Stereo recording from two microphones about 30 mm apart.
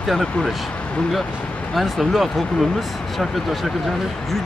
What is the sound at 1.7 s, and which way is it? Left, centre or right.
Speech, centre.